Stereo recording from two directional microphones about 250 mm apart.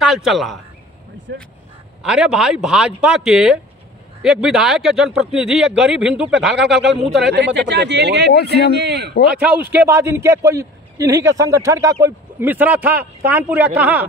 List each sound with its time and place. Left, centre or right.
0.0 s speech: centre
1.3 s speech: right
2.0 s speech: centre
7.2 s speech: right
9.4 s a man's voice: centre